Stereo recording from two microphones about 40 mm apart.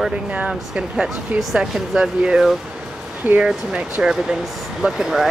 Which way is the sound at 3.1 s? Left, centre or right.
Right.